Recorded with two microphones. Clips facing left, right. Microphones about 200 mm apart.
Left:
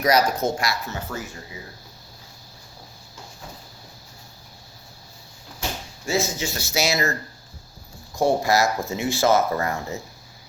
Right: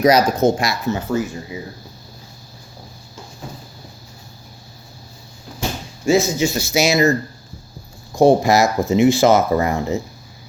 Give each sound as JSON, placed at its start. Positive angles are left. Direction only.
{"t": 0.0, "sound": "speech", "side_deg": -20}
{"t": 6.1, "sound": "speech", "side_deg": -15}